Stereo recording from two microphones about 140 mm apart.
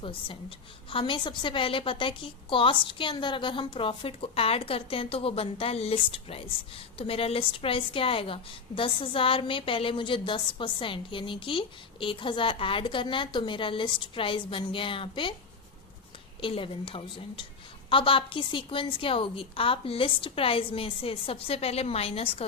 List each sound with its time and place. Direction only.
0.0 s a woman's voice: 40° left (ahead or behind)
16.4 s a woman's voice: 40° left (ahead or behind)